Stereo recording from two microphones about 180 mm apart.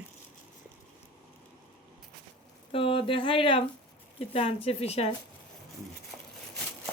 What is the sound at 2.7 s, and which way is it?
Speech, 30° left (ahead or behind).